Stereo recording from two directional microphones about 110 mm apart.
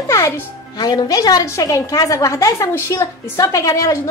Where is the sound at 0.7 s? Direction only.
35° left (ahead or behind).